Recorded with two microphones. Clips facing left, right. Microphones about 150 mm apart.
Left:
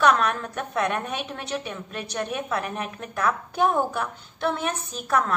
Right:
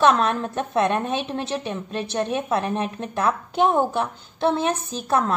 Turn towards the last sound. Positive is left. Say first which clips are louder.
# right 3 dB
turn(degrees=-30)  # may be behind; listen again after turning